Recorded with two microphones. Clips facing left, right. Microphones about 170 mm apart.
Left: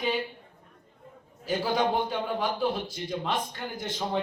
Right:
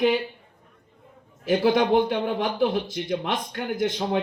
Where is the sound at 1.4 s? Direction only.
75° right (ahead or behind).